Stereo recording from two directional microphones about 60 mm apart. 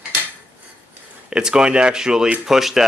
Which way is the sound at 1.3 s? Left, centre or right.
Centre.